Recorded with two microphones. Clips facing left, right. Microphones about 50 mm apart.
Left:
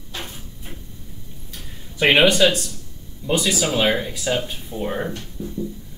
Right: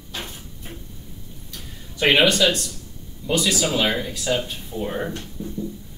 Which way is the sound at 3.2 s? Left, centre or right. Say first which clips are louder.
Left 1 dB; left.